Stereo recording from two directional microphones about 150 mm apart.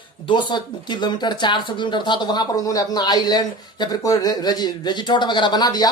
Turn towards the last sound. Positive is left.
turn(degrees=30)  # may be behind; listen again after turning